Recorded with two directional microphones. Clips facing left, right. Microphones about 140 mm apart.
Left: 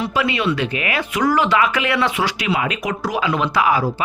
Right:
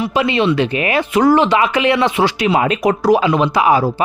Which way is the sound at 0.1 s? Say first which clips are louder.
Right 5 dB; 25° right (ahead or behind).